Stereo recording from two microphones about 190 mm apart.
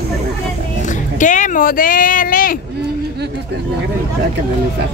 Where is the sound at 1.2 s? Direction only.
40° left (ahead or behind).